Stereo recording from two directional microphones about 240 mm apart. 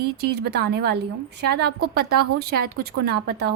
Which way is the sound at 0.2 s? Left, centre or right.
Right.